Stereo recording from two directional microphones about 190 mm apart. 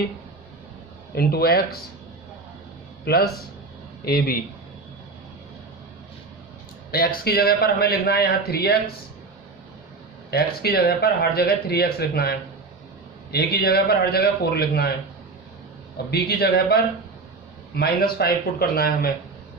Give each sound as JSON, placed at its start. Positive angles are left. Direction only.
{"t": 1.1, "sound": "speech", "side_deg": 55}
{"t": 3.0, "sound": "a man's voice", "side_deg": 55}
{"t": 6.9, "sound": "speech", "side_deg": 50}
{"t": 10.3, "sound": "speech", "side_deg": 55}
{"t": 16.1, "sound": "a man's voice", "side_deg": 55}